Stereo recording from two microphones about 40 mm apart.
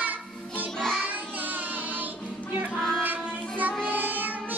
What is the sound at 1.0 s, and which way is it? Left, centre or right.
Child singing, right.